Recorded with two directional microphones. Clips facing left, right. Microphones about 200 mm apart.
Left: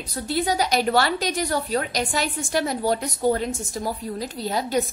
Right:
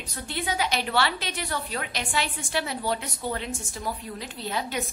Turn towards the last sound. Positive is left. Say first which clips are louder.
# left 7 dB
turn(degrees=40)  # may be behind; listen again after turning